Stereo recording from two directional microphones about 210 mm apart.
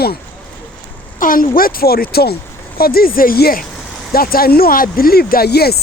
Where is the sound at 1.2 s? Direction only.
40° left (ahead or behind).